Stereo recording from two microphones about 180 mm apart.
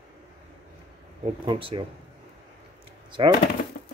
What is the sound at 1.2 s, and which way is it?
Speech, 30° right (ahead or behind).